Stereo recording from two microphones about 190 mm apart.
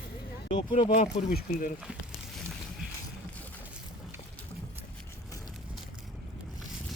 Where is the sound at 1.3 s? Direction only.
50° left (ahead or behind).